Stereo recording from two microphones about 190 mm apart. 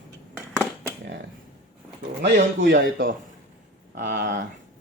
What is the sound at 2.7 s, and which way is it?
Speech, 45° right (ahead or behind).